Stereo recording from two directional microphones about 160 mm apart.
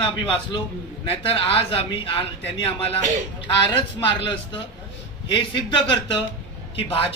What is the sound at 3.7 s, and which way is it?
Speech, 30° left (ahead or behind).